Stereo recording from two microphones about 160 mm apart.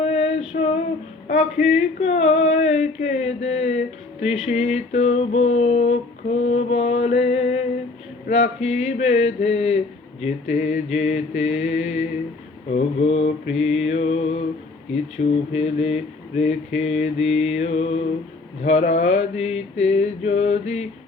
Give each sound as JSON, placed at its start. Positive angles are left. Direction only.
{"t": 0.0, "sound": "child singing", "side_deg": 40}
{"t": 1.6, "sound": "male singing", "side_deg": 45}
{"t": 6.4, "sound": "mantra", "side_deg": 40}
{"t": 8.3, "sound": "male singing", "side_deg": 45}
{"t": 12.7, "sound": "mantra", "side_deg": 40}
{"t": 13.4, "sound": "male singing", "side_deg": 45}
{"t": 15.2, "sound": "speech", "side_deg": 65}
{"t": 15.5, "sound": "mantra", "side_deg": 40}
{"t": 18.6, "sound": "male singing", "side_deg": 45}